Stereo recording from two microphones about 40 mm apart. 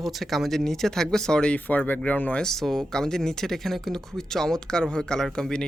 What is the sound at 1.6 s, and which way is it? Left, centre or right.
Speech, left.